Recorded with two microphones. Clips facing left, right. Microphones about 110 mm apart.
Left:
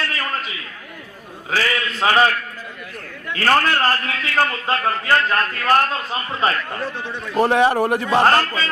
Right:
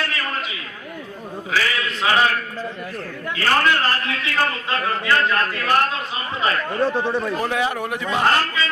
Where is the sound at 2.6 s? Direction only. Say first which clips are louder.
Right 6 dB; 35° right (ahead or behind).